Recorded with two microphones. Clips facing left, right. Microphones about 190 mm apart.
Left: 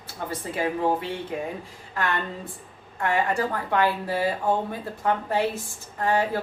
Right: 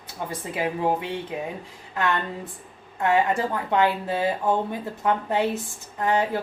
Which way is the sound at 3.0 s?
20° right (ahead or behind).